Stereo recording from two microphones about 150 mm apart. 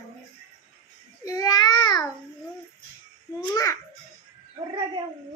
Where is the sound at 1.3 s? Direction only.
25° left (ahead or behind).